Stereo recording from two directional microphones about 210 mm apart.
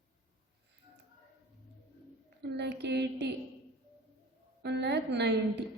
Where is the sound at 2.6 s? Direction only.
55° right (ahead or behind).